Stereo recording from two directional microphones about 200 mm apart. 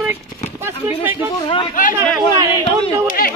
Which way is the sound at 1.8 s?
45° left (ahead or behind).